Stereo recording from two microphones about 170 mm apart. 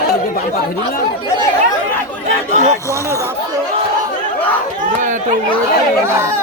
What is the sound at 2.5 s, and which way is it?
Speech, 45° right (ahead or behind).